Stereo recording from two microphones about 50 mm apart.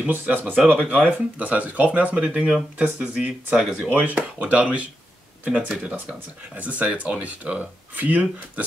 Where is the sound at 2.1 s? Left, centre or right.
Centre.